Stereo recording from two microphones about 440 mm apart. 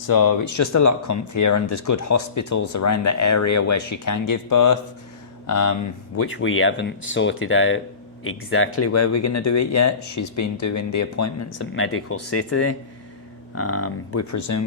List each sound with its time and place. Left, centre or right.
0.1 s speech: left
6.1 s speech: left